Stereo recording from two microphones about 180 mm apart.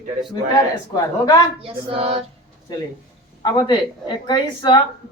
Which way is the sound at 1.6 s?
30° right (ahead or behind).